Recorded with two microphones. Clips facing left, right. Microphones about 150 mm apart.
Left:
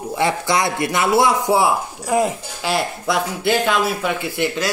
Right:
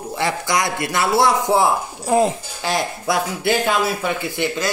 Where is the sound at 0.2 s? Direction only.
25° left (ahead or behind); by 1.7 s 10° left (ahead or behind).